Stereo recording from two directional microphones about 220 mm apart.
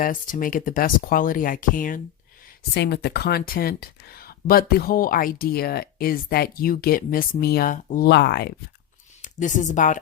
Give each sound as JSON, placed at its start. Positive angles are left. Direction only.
{"t": 0.0, "sound": "speech", "side_deg": 40}
{"t": 2.7, "sound": "speech", "side_deg": 50}
{"t": 9.2, "sound": "speech", "side_deg": 35}